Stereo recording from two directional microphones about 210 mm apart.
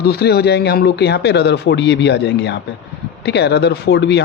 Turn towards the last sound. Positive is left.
turn(degrees=55)  # may be behind; listen again after turning